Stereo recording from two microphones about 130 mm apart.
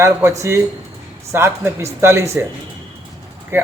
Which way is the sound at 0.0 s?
20° right (ahead or behind).